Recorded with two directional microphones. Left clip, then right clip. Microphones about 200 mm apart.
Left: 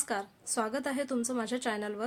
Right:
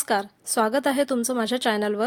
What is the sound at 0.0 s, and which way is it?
A woman's voice, 40° right (ahead or behind).